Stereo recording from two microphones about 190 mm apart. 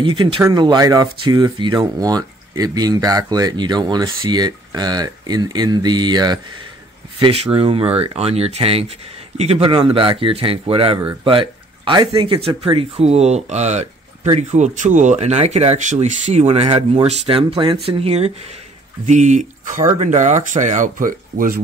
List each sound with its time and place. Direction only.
0.0 s speech: 25° right (ahead or behind); by 21.5 s 45° right (ahead or behind)